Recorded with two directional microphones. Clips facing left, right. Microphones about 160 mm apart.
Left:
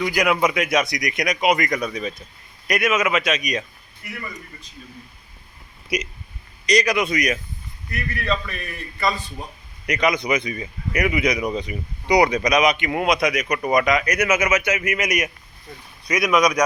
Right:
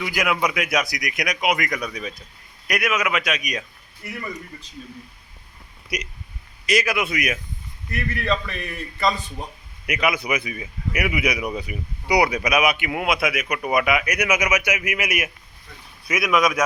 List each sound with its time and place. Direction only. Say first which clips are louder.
0.0 s a man's voice: left 4 dB; centre (ahead or behind)
6.7 s a man's voice: left 3 dB; 5° right (ahead or behind)
8.4 s a man's voice: right 2 dB; 25° right (ahead or behind)
9.8 s a man's voice: left 2 dB; 5° right (ahead or behind)